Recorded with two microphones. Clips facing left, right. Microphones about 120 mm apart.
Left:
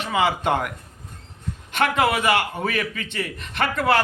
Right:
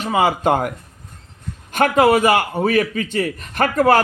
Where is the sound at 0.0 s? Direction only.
40° right (ahead or behind).